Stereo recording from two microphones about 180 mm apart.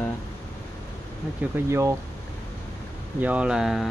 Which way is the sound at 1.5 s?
15° right (ahead or behind).